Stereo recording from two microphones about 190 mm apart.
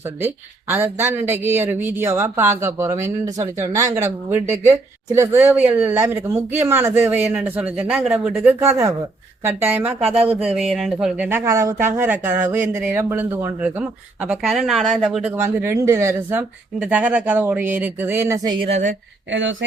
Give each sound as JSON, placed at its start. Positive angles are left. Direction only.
{"t": 0.2, "sound": "speech", "side_deg": -10}
{"t": 18.6, "sound": "speech", "side_deg": -40}
{"t": 19.3, "sound": "speech", "side_deg": -80}